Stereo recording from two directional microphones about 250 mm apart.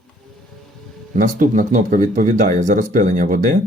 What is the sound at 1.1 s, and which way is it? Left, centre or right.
Speech, right.